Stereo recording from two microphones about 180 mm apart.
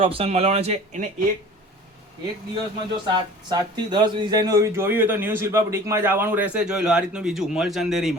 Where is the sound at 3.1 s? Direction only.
25° right (ahead or behind); by 8.2 s centre (ahead or behind).